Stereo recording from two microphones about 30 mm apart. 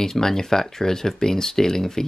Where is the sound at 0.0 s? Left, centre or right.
Centre.